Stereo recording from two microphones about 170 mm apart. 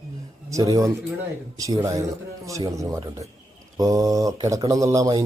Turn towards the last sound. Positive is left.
turn(degrees=-20)  # may be behind; listen again after turning